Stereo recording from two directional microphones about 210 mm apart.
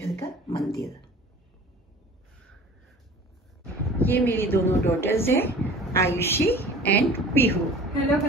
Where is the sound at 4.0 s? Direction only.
10° left (ahead or behind).